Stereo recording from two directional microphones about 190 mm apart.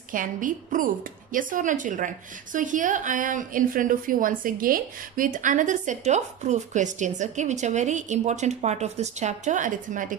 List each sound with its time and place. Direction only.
0.1 s a woman's voice: 45° right (ahead or behind)